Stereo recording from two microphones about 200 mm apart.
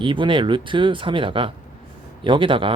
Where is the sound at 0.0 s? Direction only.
25° right (ahead or behind).